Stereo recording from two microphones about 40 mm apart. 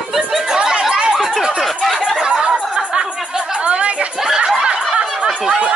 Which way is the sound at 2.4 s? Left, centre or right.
Right.